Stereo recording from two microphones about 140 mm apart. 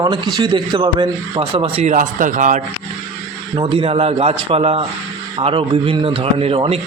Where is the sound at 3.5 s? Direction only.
35° right (ahead or behind).